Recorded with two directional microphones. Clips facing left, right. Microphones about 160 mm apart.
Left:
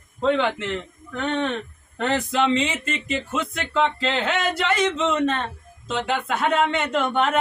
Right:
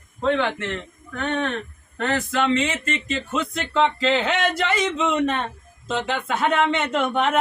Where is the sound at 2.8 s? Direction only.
10° left (ahead or behind).